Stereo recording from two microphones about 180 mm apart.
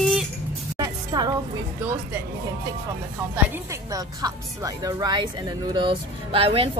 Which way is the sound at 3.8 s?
20° right (ahead or behind).